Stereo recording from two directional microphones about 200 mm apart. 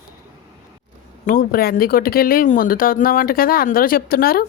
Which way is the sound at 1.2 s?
45° left (ahead or behind).